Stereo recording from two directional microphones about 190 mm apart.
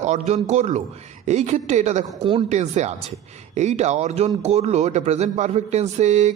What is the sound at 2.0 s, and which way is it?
Speech, 25° right (ahead or behind).